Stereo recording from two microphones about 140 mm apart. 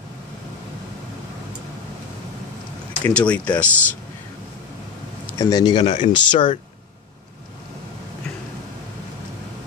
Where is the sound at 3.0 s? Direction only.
10° left (ahead or behind).